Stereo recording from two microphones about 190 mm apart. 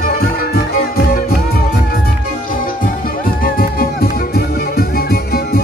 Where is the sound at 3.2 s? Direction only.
50° left (ahead or behind).